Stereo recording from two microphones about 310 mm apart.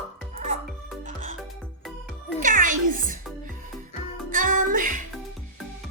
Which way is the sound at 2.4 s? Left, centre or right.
Right.